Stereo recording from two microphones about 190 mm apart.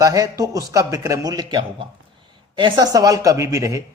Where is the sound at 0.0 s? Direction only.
15° right (ahead or behind).